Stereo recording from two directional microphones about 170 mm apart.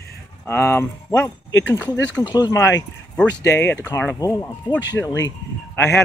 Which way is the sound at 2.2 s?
20° left (ahead or behind).